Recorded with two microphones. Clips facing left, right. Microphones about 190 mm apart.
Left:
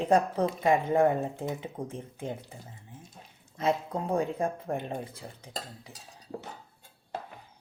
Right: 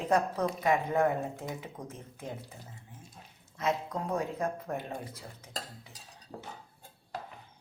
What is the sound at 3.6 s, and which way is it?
Speech, 30° left (ahead or behind).